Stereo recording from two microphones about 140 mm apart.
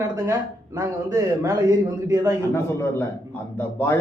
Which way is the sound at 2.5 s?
15° left (ahead or behind).